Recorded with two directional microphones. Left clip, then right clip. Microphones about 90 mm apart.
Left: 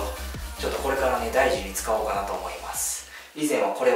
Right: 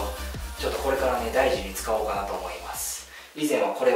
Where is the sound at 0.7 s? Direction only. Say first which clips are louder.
Even; centre (ahead or behind).